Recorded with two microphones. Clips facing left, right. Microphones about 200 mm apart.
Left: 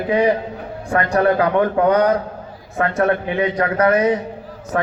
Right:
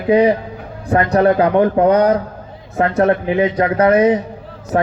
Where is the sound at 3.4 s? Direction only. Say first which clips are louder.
Right 2 dB; 25° right (ahead or behind).